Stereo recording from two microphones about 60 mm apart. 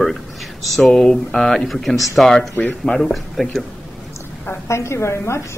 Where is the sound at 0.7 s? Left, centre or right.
Centre.